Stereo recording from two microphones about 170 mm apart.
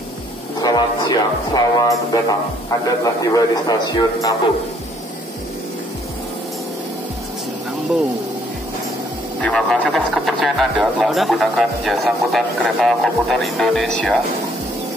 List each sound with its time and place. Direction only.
0.6 s speech: 25° left (ahead or behind)
9.4 s speech: 5° left (ahead or behind)